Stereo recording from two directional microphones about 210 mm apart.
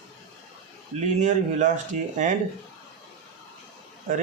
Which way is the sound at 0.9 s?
35° right (ahead or behind).